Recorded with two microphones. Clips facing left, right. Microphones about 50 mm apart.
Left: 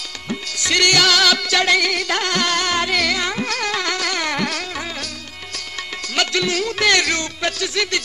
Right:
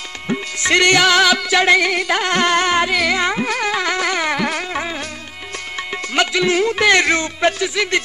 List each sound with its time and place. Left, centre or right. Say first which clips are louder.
0.3 s music: right 5 dB; right
2.9 s carnatic music: right 2 dB; centre
3.3 s music: right 3 dB; centre
6.1 s speech: right 4 dB; right